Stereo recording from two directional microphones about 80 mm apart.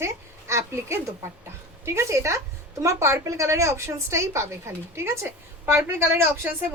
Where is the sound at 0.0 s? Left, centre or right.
Right.